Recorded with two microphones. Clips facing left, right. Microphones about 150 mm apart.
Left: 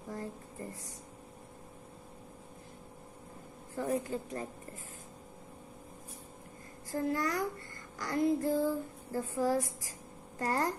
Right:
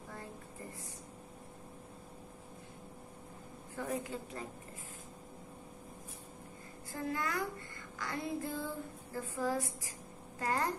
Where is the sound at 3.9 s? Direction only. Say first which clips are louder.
Left 6 dB; 40° left (ahead or behind).